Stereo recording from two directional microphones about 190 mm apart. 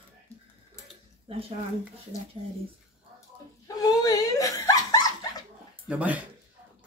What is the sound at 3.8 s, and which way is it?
Laughter, 20° left (ahead or behind).